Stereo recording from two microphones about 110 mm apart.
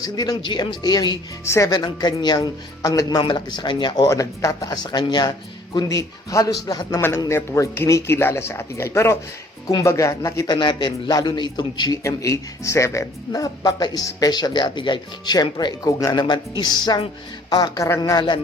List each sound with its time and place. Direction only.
0.0 s speech: 35° left (ahead or behind)
1.5 s speech: 25° left (ahead or behind)
1.7 s speech: 40° left (ahead or behind)
7.3 s speech: 25° left (ahead or behind); by 11.9 s 40° left (ahead or behind)
12.0 s speech: 30° left (ahead or behind)